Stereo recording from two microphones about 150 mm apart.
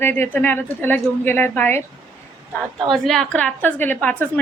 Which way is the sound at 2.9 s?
Centre (ahead or behind).